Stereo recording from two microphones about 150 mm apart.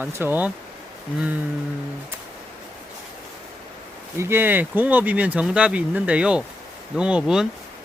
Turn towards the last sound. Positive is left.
turn(degrees=-5)  # may be behind; listen again after turning